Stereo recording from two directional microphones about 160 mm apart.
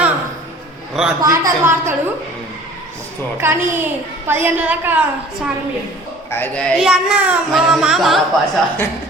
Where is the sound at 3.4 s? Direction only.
15° right (ahead or behind).